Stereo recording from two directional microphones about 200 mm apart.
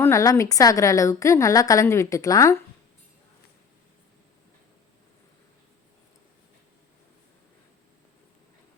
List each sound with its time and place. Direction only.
0.0 s a woman's voice: 15° left (ahead or behind)